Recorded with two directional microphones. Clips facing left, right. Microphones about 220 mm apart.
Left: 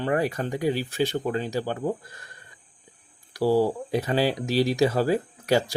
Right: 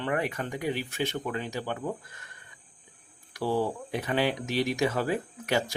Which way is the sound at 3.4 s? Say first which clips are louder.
Left 7 dB; 35° left (ahead or behind).